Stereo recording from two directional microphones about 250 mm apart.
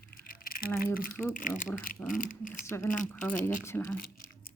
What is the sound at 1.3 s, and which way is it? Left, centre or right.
Speech, left.